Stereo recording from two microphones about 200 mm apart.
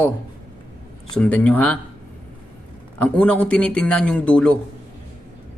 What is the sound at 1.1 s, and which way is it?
Speech, 5° left (ahead or behind).